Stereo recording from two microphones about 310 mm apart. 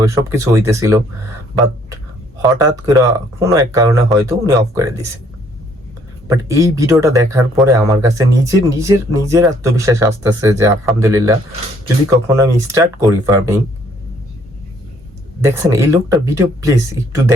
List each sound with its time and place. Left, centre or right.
0.0 s speech: centre
2.4 s speech: centre
6.2 s speech: centre
15.4 s speech: centre